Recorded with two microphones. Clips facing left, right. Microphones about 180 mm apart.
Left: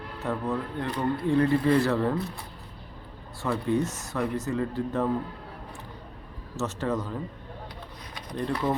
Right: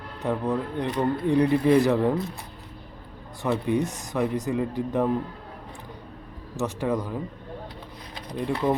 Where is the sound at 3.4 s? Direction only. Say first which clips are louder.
Right 2 dB; 20° right (ahead or behind).